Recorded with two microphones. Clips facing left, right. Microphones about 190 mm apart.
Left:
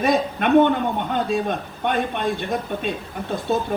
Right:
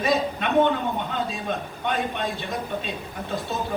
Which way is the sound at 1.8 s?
55° left (ahead or behind).